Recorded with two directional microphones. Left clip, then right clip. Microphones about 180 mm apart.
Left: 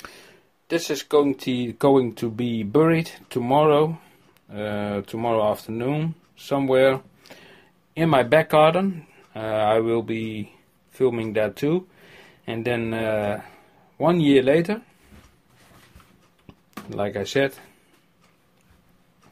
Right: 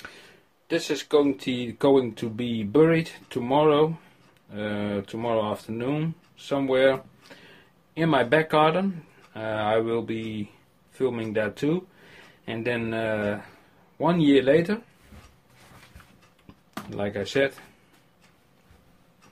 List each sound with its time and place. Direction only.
0.0 s speech: 35° left (ahead or behind)
16.9 s speech: 35° left (ahead or behind)